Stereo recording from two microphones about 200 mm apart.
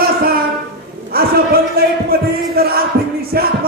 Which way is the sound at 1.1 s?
50° right (ahead or behind).